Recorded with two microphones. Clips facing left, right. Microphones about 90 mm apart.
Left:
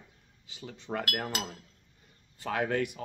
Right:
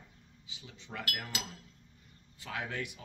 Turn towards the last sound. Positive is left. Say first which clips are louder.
# left 9 dB
turn(degrees=55)  # may be behind; listen again after turning